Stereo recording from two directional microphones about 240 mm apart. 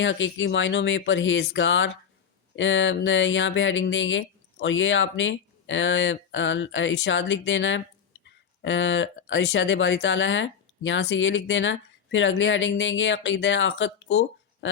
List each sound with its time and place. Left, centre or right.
0.0 s speech: left